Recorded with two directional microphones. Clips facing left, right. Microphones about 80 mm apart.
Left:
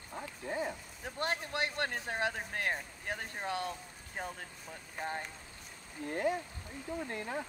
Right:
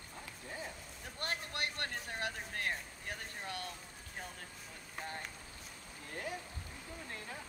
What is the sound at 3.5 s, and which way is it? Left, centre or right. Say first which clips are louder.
Speech: left 9 dB; left.